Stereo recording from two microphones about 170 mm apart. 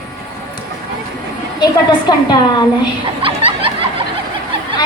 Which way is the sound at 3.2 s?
30° right (ahead or behind).